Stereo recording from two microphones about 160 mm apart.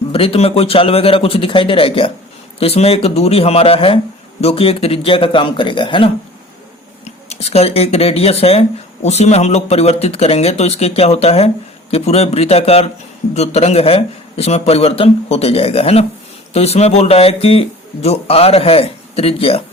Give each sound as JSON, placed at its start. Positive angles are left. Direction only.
{"t": 0.1, "sound": "speech", "side_deg": 35}
{"t": 7.0, "sound": "speech", "side_deg": 40}